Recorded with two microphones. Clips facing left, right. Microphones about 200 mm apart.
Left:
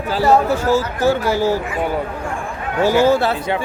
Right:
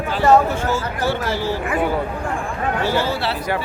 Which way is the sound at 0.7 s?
40° left (ahead or behind).